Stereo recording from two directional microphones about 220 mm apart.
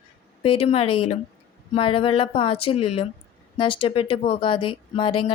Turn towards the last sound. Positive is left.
turn(degrees=25)  # may be behind; listen again after turning